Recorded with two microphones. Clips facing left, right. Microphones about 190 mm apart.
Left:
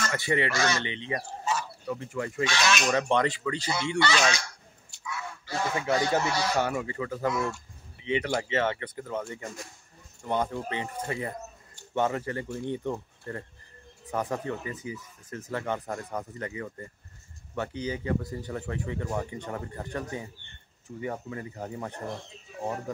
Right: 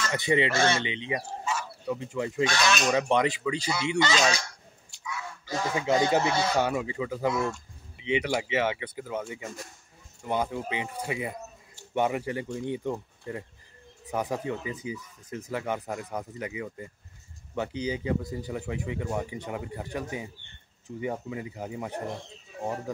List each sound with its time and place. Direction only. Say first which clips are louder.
0.1 s speech: right 4 dB; 20° right (ahead or behind)
0.8 s speech: right 1 dB; 15° right (ahead or behind)
2.4 s speech: right 1 dB; 45° right (ahead or behind)
2.9 s speech: right 1 dB; 10° right (ahead or behind)
5.5 s speech: right 2 dB; 20° right (ahead or behind)